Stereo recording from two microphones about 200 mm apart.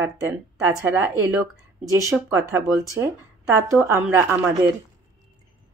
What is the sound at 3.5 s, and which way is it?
Speech, 10° right (ahead or behind).